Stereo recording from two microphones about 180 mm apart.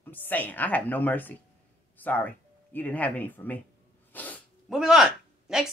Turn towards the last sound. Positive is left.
turn(degrees=-5)  # may be behind; listen again after turning